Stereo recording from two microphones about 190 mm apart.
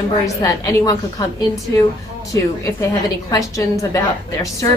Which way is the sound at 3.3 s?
15° left (ahead or behind).